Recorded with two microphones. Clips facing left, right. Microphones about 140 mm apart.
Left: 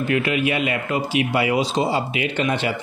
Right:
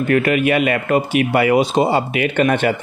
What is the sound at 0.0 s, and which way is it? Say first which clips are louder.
Speech: right 5 dB; 55° right (ahead or behind).